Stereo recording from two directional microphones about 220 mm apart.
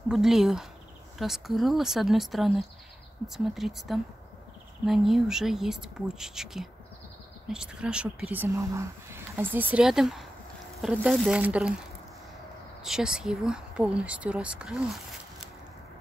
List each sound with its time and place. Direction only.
0.1 s speech: centre (ahead or behind)
12.8 s speech: 5° right (ahead or behind)